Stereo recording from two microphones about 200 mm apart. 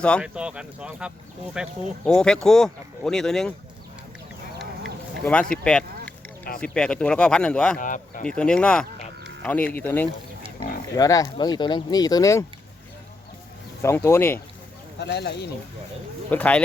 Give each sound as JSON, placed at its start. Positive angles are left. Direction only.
{"t": 0.2, "sound": "speech", "side_deg": -5}
{"t": 5.2, "sound": "a sound", "side_deg": 5}
{"t": 6.6, "sound": "speech", "side_deg": 5}
{"t": 7.8, "sound": "speech", "side_deg": 40}
{"t": 8.3, "sound": "speech", "side_deg": 5}
{"t": 13.8, "sound": "speech", "side_deg": 15}
{"t": 14.9, "sound": "speech", "side_deg": 55}
{"t": 16.3, "sound": "speech", "side_deg": 5}